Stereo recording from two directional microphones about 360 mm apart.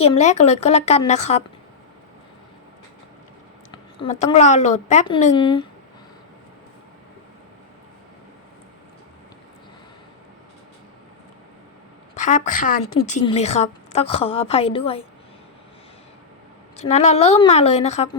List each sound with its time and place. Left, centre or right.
0.0 s a woman's voice: centre
3.7 s a woman's voice: centre
12.1 s a woman's voice: centre
16.9 s a woman's voice: centre